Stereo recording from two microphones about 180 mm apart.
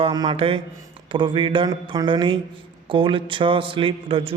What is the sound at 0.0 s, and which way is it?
Speech, 25° right (ahead or behind).